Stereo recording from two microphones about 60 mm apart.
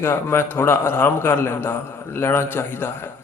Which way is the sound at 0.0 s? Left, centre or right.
Left.